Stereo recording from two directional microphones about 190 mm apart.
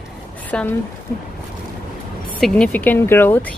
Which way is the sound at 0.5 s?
5° left (ahead or behind).